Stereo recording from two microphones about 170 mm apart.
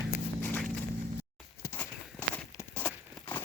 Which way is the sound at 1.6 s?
10° left (ahead or behind).